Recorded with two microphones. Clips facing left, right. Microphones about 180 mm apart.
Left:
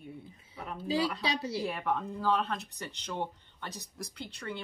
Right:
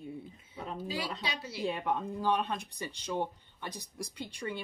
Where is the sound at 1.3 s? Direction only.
30° left (ahead or behind).